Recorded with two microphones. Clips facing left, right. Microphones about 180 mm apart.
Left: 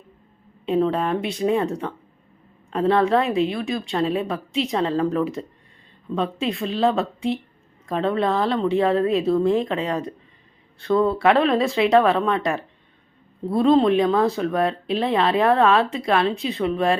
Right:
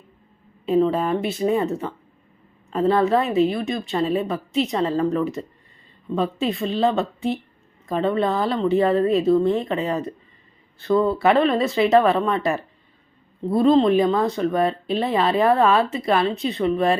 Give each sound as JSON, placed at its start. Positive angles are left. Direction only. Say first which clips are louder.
{"t": 0.6, "sound": "speech", "louder": "right 2 dB", "side_deg": 0}